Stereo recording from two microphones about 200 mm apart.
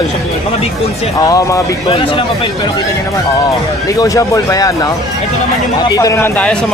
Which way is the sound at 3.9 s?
15° left (ahead or behind).